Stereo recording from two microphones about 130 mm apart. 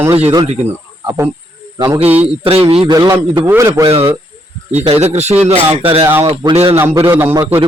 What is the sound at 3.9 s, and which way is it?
Speech, 45° right (ahead or behind).